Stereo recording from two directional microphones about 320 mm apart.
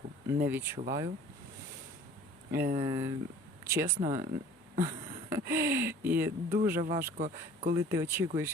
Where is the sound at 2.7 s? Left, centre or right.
Centre.